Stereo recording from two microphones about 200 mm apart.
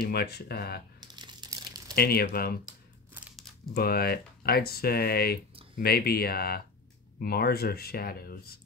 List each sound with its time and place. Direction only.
0.0 s speech: 50° left (ahead or behind)
1.0 s crumpling: 20° right (ahead or behind)
2.0 s speech: 50° left (ahead or behind)
3.3 s crumpling: centre (ahead or behind)
3.7 s speech: 50° left (ahead or behind)